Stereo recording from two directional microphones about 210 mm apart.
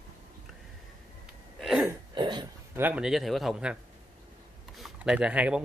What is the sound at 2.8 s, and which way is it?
Speech, 5° right (ahead or behind).